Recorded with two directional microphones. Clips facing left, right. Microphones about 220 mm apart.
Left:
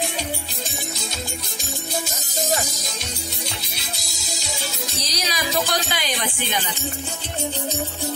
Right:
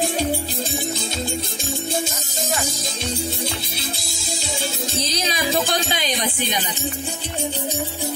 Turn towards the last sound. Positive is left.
turn(degrees=-20)  # may be behind; listen again after turning